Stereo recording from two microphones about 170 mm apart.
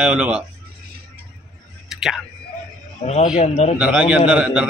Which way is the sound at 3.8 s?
5° right (ahead or behind).